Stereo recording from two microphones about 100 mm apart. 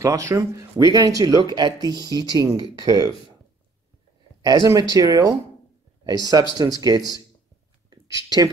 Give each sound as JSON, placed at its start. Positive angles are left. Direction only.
{"t": 0.0, "sound": "speech", "side_deg": -30}
{"t": 4.4, "sound": "speech", "side_deg": -40}
{"t": 7.9, "sound": "a sound", "side_deg": -40}